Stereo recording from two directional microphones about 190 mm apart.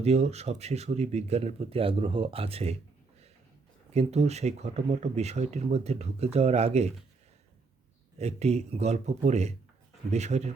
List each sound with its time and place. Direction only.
0.0 s speech: 35° right (ahead or behind)
3.9 s speech: 35° right (ahead or behind)
8.2 s speech: 35° right (ahead or behind)